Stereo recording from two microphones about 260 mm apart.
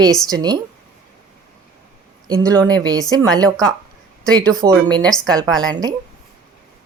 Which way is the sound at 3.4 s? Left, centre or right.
Centre.